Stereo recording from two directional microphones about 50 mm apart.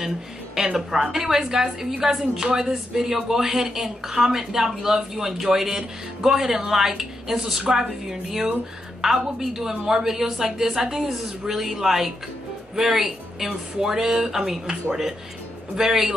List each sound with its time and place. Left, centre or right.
0.7 s a woman's voice: centre